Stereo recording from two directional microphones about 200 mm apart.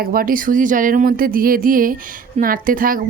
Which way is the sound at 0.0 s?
45° right (ahead or behind).